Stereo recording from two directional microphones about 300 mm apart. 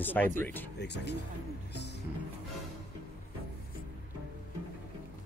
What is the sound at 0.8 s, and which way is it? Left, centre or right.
Speech, left.